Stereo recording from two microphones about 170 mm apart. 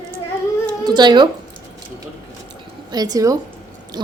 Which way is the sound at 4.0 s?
25° right (ahead or behind).